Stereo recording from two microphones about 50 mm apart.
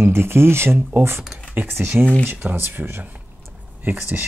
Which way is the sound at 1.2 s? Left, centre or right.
Centre.